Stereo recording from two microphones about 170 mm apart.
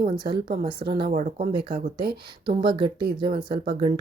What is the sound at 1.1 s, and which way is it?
Speech, 40° right (ahead or behind).